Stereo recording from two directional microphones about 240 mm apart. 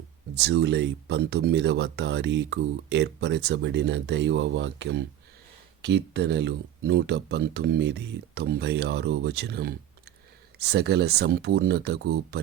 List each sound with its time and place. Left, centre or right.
0.3 s speech: right